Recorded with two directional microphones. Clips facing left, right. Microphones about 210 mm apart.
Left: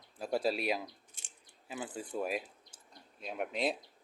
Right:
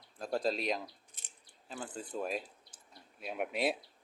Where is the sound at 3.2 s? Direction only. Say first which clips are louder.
Right 1 dB; 5° right (ahead or behind).